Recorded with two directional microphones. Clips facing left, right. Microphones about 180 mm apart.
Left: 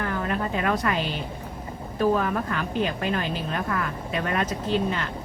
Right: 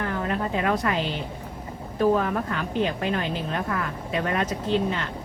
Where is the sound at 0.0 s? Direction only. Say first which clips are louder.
Even; 25° right (ahead or behind).